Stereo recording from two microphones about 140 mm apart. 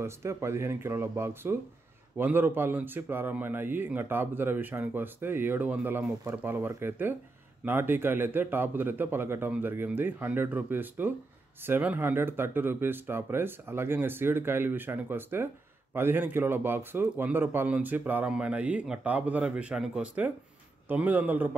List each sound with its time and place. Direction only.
0.0 s speech: 20° right (ahead or behind)